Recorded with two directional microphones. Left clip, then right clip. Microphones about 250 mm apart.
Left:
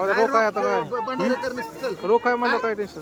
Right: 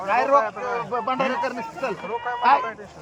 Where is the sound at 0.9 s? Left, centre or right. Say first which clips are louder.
Right 1 dB; centre.